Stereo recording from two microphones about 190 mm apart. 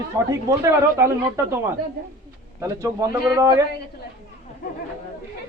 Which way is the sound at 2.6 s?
15° right (ahead or behind).